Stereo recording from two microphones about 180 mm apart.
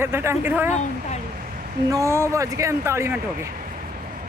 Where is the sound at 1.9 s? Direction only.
15° right (ahead or behind).